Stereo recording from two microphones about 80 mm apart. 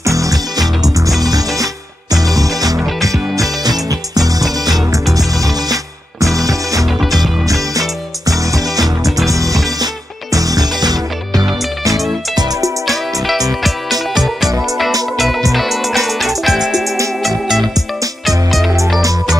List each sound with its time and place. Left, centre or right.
0.0 s music: right
8.3 s music: right
12.8 s music: centre
18.5 s music: centre